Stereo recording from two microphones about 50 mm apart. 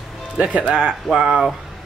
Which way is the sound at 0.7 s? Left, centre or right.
Centre.